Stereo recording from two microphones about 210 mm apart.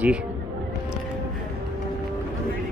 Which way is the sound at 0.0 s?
5° right (ahead or behind).